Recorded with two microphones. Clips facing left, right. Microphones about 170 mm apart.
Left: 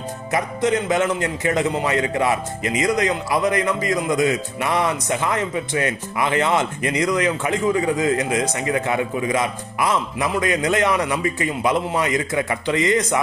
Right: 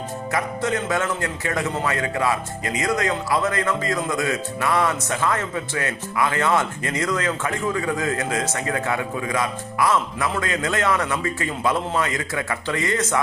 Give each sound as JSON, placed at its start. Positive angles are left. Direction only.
{"t": 0.3, "sound": "a man's voice", "side_deg": 20}